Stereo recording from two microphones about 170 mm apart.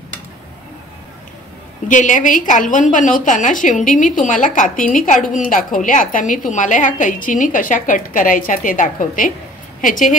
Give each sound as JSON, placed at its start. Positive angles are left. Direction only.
{"t": 1.9, "sound": "a woman's voice", "side_deg": 50}